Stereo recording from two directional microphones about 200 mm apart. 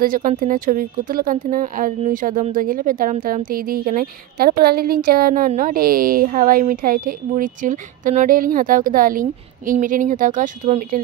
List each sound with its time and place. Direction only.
0.0 s speech: 45° right (ahead or behind)